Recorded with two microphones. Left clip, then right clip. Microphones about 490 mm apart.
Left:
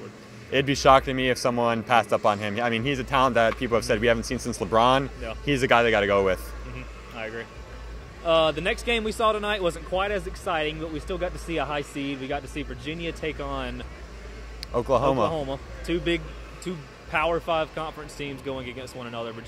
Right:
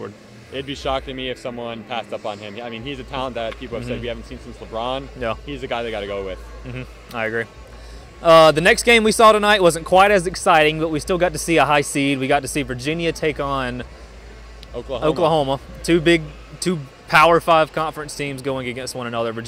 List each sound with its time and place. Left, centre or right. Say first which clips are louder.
0.5 s speech: left 6 dB; left
7.2 s speech: right 11 dB; right
14.7 s speech: left 4 dB; left
15.0 s speech: right 7 dB; right